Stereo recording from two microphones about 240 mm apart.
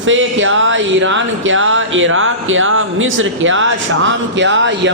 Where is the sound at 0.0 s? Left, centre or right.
Right.